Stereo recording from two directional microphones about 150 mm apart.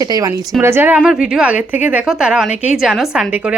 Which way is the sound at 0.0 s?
25° right (ahead or behind).